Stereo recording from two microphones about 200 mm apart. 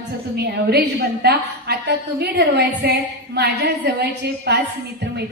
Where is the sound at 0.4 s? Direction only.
55° right (ahead or behind).